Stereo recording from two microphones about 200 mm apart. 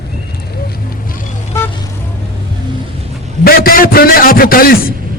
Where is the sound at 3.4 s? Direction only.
45° left (ahead or behind).